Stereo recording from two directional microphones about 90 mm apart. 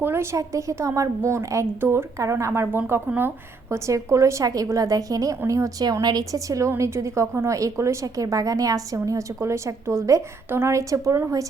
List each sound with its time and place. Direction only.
0.0 s a woman's voice: 30° right (ahead or behind)
5.8 s a woman's voice: 50° right (ahead or behind)